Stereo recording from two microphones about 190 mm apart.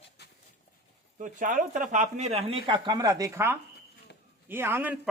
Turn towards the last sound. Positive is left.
turn(degrees=-10)  # may be behind; listen again after turning